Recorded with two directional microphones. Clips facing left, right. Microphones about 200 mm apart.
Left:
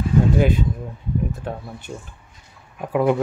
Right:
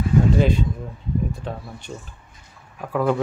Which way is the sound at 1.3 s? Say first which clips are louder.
Left 2 dB; 5° left (ahead or behind).